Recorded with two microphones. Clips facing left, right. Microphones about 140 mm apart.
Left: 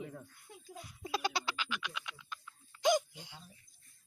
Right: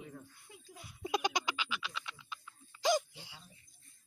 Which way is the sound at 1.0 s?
15° right (ahead or behind).